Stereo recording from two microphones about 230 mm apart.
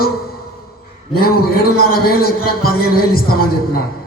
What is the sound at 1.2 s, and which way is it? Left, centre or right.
A man's voice, left.